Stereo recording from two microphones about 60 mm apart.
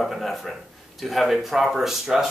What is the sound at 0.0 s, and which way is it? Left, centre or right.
Speech, centre.